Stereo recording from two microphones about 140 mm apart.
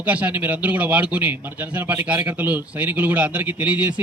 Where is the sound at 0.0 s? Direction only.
10° right (ahead or behind).